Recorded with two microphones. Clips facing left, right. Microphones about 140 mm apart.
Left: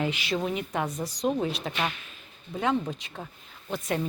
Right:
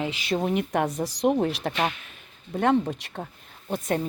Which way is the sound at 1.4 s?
60° right (ahead or behind).